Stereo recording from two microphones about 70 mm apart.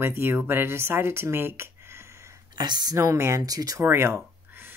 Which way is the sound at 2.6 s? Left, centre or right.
Right.